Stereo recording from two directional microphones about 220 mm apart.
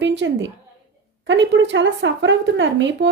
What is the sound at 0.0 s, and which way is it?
A woman's voice, 55° right (ahead or behind).